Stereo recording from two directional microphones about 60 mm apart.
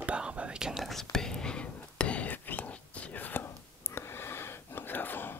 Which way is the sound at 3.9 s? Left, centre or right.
Left.